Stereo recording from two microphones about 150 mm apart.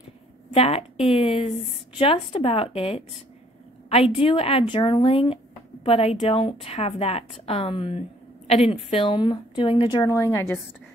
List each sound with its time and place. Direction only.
0.5 s a woman's voice: 40° left (ahead or behind)
10.0 s a woman's voice: 20° left (ahead or behind)